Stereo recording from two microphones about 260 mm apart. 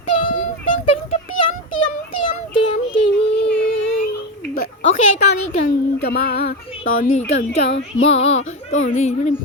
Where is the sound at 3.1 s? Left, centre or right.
Left.